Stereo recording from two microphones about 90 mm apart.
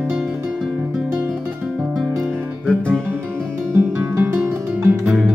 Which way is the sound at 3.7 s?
20° right (ahead or behind).